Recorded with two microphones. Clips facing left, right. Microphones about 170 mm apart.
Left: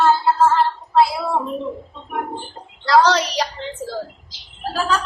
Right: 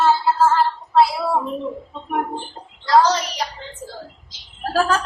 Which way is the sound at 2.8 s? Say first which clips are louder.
Left 1 dB; 70° left (ahead or behind).